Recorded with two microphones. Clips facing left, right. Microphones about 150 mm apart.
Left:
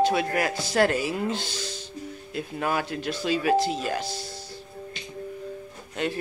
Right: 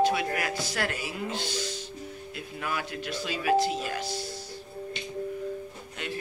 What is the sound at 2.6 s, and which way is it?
Speech, 35° left (ahead or behind).